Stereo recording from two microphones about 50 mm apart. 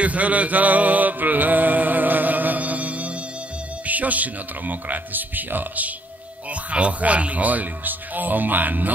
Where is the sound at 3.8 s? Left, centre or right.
Right.